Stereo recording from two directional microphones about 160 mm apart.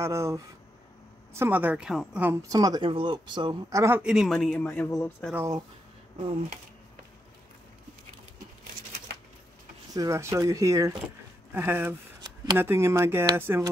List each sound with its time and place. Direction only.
0.0 s speech: 15° right (ahead or behind)
2.4 s speech: 20° right (ahead or behind)
3.8 s speech: 15° right (ahead or behind)
4.1 s speech: centre (ahead or behind)
5.3 s speech: 20° right (ahead or behind)
9.9 s speech: 20° right (ahead or behind)